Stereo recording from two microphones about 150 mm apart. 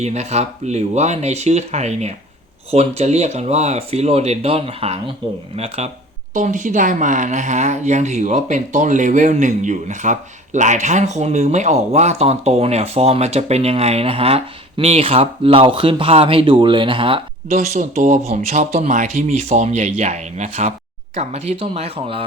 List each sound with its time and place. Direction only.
0.0 s speech: 45° right (ahead or behind)
6.3 s speech: 55° right (ahead or behind); by 17.6 s 35° right (ahead or behind)
17.6 s speech: 50° right (ahead or behind)